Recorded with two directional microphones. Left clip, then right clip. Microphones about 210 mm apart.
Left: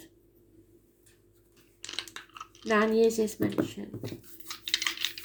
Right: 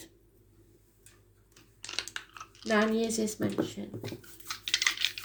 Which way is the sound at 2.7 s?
25° right (ahead or behind).